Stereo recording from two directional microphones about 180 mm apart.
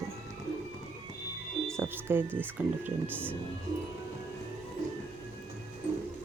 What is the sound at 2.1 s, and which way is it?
Speech, 10° right (ahead or behind).